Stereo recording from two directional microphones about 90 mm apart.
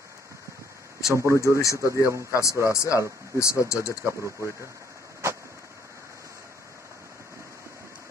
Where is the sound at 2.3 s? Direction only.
35° left (ahead or behind).